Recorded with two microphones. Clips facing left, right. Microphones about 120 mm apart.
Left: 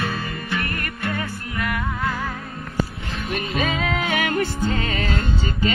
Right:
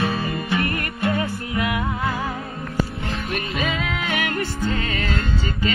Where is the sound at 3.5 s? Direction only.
25° left (ahead or behind).